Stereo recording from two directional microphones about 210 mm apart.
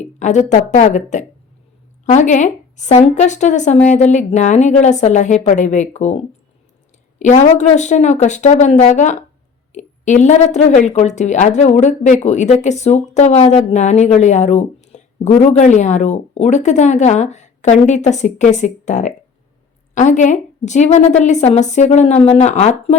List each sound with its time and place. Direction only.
0.0 s a woman's voice: 35° left (ahead or behind)